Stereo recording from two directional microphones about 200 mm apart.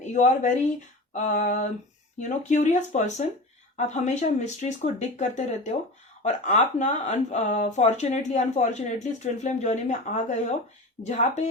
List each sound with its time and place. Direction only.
0.0 s speech: 35° left (ahead or behind)